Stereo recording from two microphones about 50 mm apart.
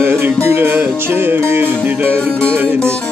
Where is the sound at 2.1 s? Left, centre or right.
Left.